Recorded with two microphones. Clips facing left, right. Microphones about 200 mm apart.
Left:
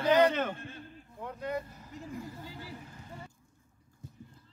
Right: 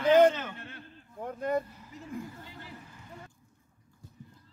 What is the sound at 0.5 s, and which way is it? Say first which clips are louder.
Speech: left 1 dB; 65° right (ahead or behind).